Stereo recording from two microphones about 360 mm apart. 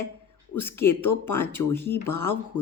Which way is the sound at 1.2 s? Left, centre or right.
Centre.